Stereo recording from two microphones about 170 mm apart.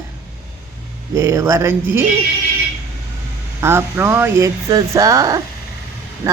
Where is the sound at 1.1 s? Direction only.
15° right (ahead or behind).